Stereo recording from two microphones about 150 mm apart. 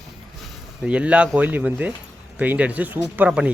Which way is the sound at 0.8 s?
10° right (ahead or behind).